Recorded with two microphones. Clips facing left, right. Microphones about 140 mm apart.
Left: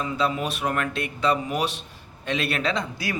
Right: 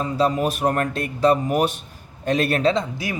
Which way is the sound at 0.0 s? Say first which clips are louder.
Right 5 dB; 40° right (ahead or behind).